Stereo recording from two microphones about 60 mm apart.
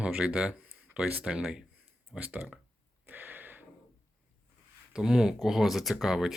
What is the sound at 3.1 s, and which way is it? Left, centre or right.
Gasp, right.